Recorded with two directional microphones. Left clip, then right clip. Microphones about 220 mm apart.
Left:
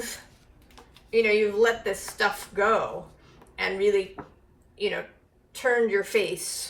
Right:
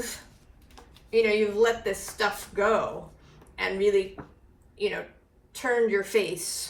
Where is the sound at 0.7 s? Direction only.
10° right (ahead or behind).